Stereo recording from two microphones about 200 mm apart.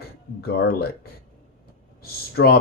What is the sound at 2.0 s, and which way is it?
Speech, 50° left (ahead or behind).